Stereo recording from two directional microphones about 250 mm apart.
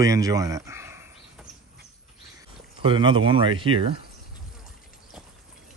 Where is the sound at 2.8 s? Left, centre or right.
Centre.